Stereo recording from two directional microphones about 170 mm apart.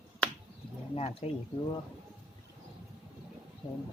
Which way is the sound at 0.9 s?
35° left (ahead or behind).